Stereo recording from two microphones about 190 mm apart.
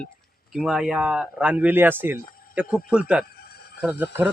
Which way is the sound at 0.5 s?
Centre (ahead or behind).